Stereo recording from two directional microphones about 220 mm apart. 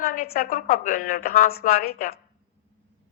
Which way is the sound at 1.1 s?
40° left (ahead or behind).